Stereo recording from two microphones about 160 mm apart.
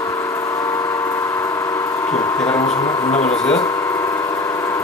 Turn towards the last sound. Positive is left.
turn(degrees=5)  # may be behind; listen again after turning